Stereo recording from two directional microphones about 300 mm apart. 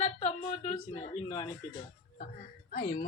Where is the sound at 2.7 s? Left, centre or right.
Left.